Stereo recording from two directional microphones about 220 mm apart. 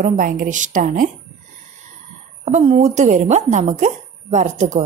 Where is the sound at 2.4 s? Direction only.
30° right (ahead or behind).